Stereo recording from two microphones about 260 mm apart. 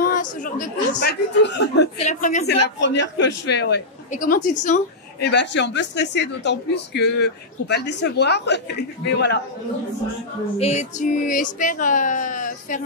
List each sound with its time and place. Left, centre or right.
0.0 s speech: left
2.0 s speech: left
2.4 s speech: left
5.3 s speech: left
10.6 s speech: left